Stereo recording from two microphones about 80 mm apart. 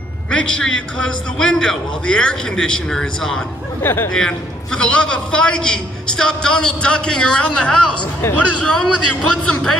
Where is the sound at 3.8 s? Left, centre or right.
Left.